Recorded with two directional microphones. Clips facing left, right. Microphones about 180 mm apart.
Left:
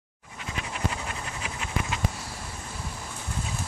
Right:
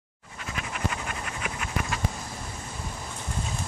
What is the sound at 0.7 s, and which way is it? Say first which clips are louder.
Pant: even; 30° left (ahead or behind).